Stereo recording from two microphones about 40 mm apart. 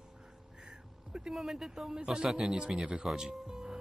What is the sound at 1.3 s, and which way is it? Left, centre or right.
Speech, centre.